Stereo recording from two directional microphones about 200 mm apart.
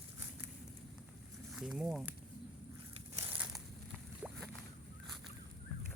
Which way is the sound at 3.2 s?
10° right (ahead or behind).